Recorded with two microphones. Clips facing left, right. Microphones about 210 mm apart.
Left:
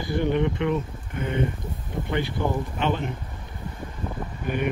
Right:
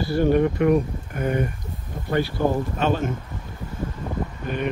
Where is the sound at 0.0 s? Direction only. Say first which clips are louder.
Right 4 dB; 20° left (ahead or behind).